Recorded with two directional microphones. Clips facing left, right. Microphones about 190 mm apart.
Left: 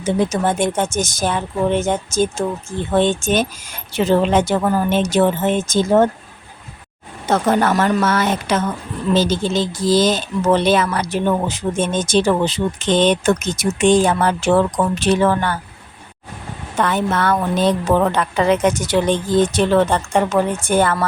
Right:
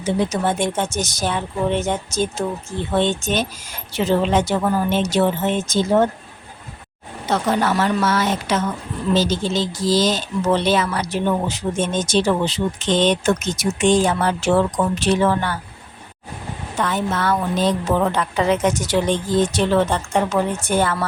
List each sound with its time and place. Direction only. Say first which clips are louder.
0.0 s speech: left 2 dB; 50° left (ahead or behind)
7.3 s speech: left 3 dB; 50° left (ahead or behind)
16.7 s a woman's voice: left 4 dB; 60° left (ahead or behind)